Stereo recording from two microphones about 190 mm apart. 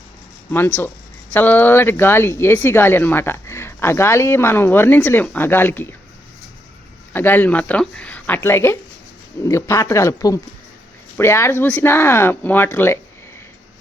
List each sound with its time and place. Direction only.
0.5 s speech: 10° left (ahead or behind)
7.1 s speech: 10° left (ahead or behind)